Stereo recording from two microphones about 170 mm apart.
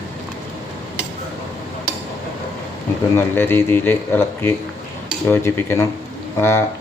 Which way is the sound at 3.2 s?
15° left (ahead or behind).